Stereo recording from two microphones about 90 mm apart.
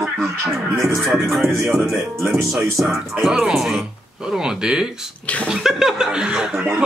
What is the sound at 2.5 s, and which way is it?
Speech, centre (ahead or behind).